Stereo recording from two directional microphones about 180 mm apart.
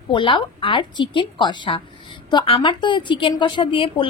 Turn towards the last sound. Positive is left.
turn(degrees=30)  # may be behind; listen again after turning